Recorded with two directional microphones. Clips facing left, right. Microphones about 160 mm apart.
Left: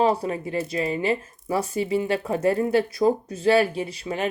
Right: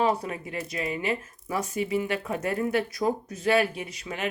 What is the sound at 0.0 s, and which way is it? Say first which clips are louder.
Speech: left 4 dB; 30° left (ahead or behind).